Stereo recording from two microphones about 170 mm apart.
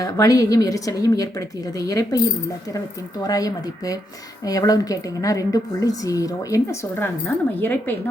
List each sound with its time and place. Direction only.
0.0 s a woman's voice: 20° left (ahead or behind)